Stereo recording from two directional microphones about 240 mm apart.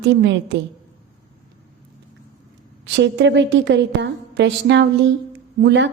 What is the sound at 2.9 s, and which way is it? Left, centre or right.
A woman's voice, right.